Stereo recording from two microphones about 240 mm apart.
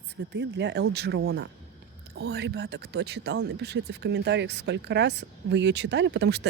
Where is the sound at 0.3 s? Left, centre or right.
Right.